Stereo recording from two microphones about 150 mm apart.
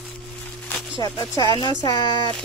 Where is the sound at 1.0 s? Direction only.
30° left (ahead or behind).